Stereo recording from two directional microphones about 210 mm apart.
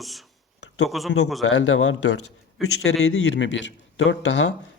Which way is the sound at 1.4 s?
70° left (ahead or behind).